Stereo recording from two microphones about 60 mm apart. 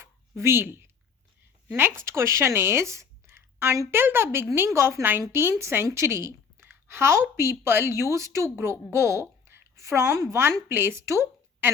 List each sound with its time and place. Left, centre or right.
0.0 s a sound: right
1.6 s a woman's voice: right
10.7 s a woman's voice: right
11.6 s speech: right